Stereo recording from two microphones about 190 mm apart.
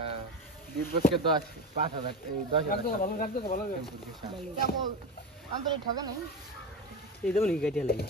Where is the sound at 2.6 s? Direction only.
50° left (ahead or behind).